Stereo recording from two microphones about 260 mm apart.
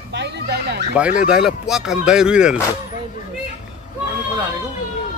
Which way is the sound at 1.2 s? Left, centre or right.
Centre.